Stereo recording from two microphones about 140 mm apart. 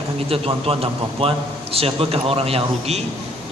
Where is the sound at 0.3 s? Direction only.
45° right (ahead or behind).